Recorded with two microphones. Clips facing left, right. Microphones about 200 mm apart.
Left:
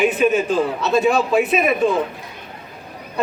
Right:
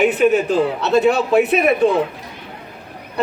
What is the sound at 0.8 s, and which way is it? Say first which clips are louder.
A man's voice: right 1 dB; 65° right (ahead or behind).